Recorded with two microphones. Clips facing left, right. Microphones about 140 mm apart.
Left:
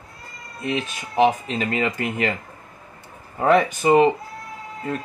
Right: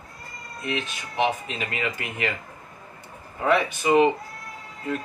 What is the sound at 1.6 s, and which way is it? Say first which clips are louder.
Speech: left 6 dB; 35° left (ahead or behind).